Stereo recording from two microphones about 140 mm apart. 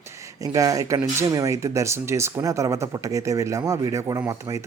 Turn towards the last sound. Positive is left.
turn(degrees=-25)  # may be behind; listen again after turning